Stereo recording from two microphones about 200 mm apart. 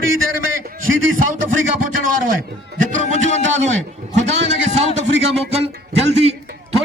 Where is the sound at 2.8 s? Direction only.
35° right (ahead or behind).